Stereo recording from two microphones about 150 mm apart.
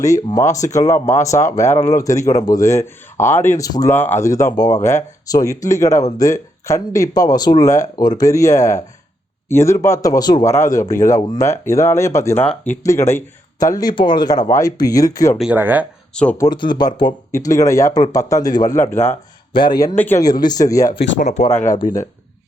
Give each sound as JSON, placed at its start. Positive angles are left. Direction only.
{"t": 0.0, "sound": "speech", "side_deg": 25}
{"t": 15.4, "sound": "speech", "side_deg": -10}
{"t": 16.4, "sound": "speech", "side_deg": 30}
{"t": 19.5, "sound": "speech", "side_deg": 30}
{"t": 20.0, "sound": "speech", "side_deg": 15}
{"t": 20.2, "sound": "speech", "side_deg": 25}
{"t": 21.2, "sound": "speech", "side_deg": 50}